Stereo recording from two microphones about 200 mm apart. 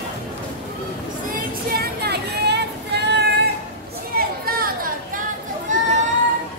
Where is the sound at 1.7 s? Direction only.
50° right (ahead or behind).